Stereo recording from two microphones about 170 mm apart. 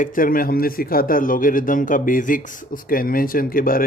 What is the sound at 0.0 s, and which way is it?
Speech, 55° left (ahead or behind).